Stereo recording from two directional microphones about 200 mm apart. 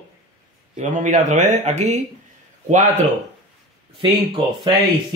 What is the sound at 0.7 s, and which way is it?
A man's voice, 40° right (ahead or behind).